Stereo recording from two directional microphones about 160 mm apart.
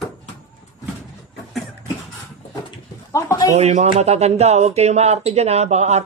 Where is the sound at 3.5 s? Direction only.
45° right (ahead or behind).